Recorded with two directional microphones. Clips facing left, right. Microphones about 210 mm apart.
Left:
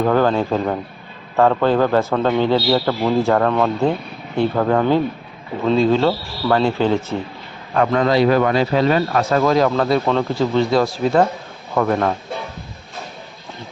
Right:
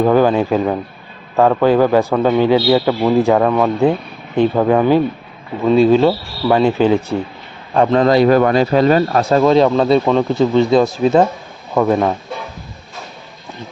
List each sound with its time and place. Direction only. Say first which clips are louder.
0.0 s a man's voice: right 4 dB; 10° right (ahead or behind)
7.7 s a man's voice: right 4 dB; 30° right (ahead or behind)
8.1 s speech: right 3 dB; 45° right (ahead or behind)
9.4 s a man's voice: right 5 dB; 25° right (ahead or behind)